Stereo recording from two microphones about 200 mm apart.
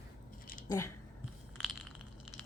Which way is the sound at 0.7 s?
15° left (ahead or behind).